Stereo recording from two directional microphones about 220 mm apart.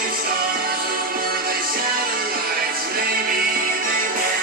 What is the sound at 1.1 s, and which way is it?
Music, 40° right (ahead or behind).